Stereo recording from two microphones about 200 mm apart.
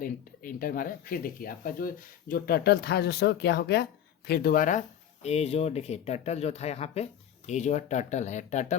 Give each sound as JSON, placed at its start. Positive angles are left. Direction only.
{"t": 0.0, "sound": "speech", "side_deg": 45}
{"t": 4.3, "sound": "speech", "side_deg": 45}
{"t": 5.2, "sound": "speech", "side_deg": 30}